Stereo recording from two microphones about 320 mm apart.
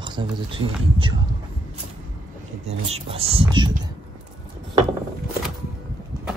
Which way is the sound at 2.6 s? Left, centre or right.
Centre.